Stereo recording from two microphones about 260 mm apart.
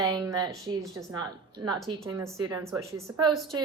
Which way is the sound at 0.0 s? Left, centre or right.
Centre.